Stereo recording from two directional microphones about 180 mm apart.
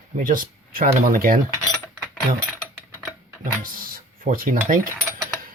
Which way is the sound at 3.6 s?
50° right (ahead or behind).